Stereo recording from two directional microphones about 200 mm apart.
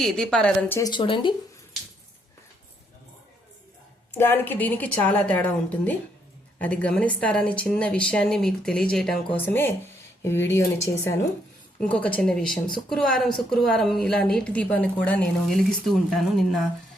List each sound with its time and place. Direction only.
0.0 s a woman's voice: centre (ahead or behind)
0.8 s speech: 20° left (ahead or behind)
4.1 s a woman's voice: 10° left (ahead or behind)
11.8 s a woman's voice: 5° left (ahead or behind)